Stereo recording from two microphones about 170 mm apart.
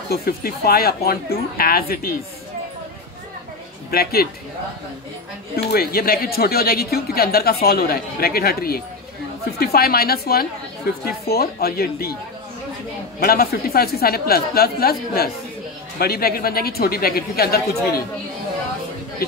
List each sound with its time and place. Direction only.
0.1 s speech: 65° left (ahead or behind)
3.9 s speech: 65° left (ahead or behind)
5.7 s speech: 65° left (ahead or behind)
13.2 s speech: 65° left (ahead or behind)